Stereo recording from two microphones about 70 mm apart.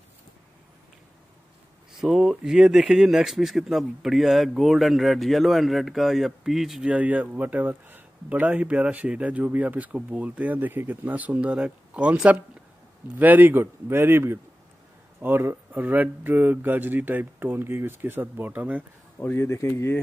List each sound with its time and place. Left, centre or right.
2.0 s speech: centre
6.9 s speech: right
19.3 s speech: left